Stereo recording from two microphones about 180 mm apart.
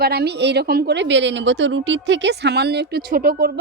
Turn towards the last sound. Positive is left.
turn(degrees=-55)  # may be behind; listen again after turning